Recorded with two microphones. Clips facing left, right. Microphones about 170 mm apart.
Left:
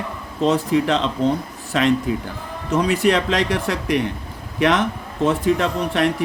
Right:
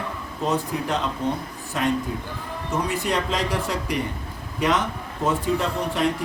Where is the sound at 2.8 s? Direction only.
80° left.